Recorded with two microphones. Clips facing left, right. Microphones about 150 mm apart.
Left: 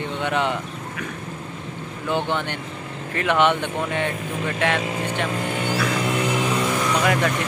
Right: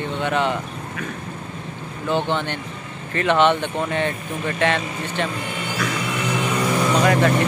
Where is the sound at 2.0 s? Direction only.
10° left (ahead or behind).